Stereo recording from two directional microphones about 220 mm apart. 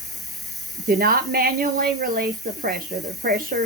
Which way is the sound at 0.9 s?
40° right (ahead or behind).